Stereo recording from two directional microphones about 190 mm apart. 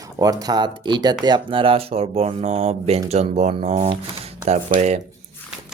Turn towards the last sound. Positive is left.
turn(degrees=-35)  # may be behind; listen again after turning